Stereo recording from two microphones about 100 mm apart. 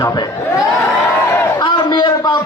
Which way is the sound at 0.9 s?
20° left (ahead or behind).